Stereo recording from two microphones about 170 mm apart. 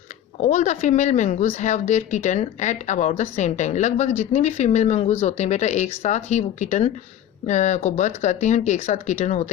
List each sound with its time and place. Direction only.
0.4 s a woman's voice: 45° left (ahead or behind)